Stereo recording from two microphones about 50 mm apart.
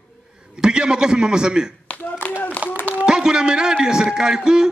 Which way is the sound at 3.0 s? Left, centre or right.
Centre.